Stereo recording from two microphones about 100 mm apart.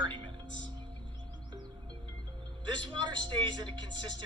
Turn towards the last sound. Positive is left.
turn(degrees=-50)  # may be behind; listen again after turning